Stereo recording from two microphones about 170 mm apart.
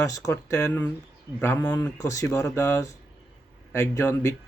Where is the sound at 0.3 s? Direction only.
15° left (ahead or behind).